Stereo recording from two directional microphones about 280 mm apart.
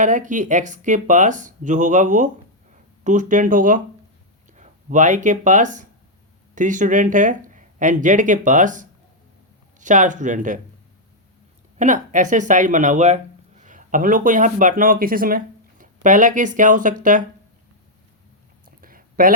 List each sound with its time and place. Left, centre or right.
0.0 s speech: right
11.8 s speech: right
18.6 s a sound: right